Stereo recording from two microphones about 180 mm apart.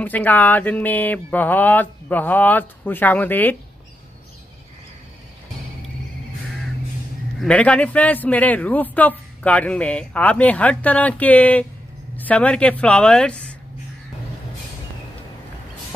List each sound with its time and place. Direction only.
0.0 s a man's voice: 10° left (ahead or behind)
7.3 s a man's voice: 5° left (ahead or behind)